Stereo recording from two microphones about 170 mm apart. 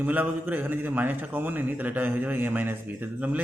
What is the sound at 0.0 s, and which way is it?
A man's voice, 10° right (ahead or behind).